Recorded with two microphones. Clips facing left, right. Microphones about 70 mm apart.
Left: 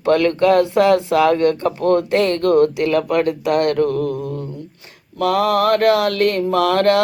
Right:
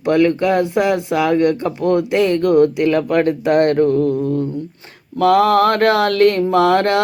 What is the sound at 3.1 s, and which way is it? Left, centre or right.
Mantra, right.